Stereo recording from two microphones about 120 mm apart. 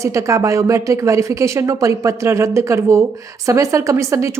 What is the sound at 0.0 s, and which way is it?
A woman's voice, 25° right (ahead or behind).